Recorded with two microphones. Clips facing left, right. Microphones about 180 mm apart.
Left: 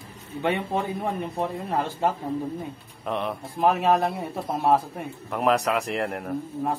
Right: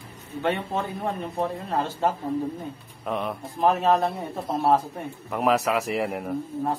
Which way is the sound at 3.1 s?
Centre (ahead or behind).